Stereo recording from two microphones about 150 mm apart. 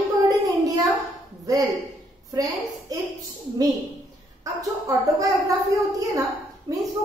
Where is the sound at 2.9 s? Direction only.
25° right (ahead or behind).